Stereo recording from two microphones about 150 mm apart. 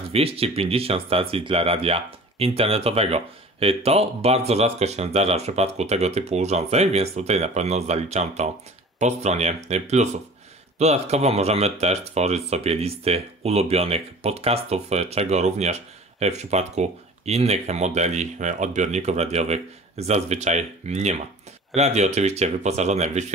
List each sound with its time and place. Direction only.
0.1 s speech: 40° right (ahead or behind)